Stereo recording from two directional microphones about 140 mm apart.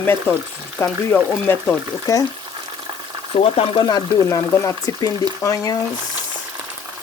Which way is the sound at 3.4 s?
40° left (ahead or behind).